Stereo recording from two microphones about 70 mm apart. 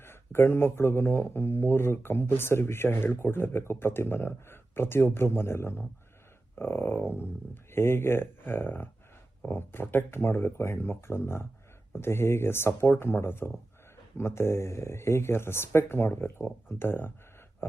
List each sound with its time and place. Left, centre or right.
0.0 s speech: left